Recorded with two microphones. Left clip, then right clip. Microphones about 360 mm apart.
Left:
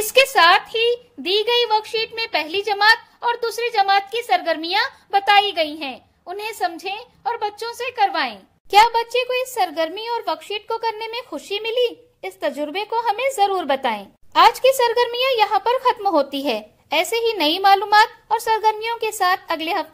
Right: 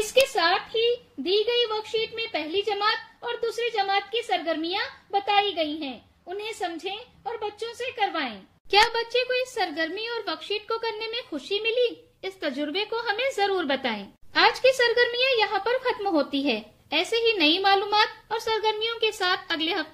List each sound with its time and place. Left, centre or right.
0.1 s a woman's voice: left